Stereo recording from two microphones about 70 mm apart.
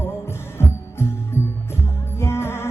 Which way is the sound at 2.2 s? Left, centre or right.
Left.